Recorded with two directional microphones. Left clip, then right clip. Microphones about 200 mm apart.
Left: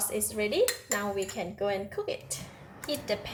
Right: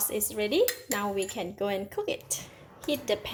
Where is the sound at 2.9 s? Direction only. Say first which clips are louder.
Right 3 dB; 45° right (ahead or behind).